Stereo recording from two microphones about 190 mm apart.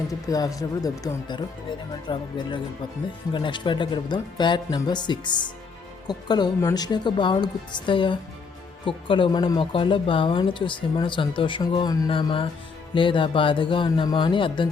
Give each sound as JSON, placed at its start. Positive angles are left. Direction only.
{"t": 0.1, "sound": "speech", "side_deg": 20}
{"t": 3.3, "sound": "speech", "side_deg": 25}